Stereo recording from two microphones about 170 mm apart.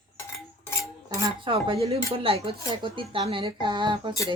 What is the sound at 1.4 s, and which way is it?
Speech, 30° right (ahead or behind).